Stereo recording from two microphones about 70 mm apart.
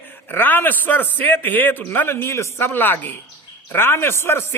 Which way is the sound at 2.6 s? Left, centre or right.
Left.